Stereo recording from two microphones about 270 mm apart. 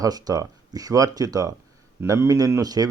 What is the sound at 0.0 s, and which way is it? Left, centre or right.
Speech, centre.